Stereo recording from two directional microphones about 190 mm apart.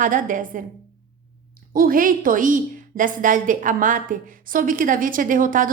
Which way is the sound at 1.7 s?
50° right (ahead or behind).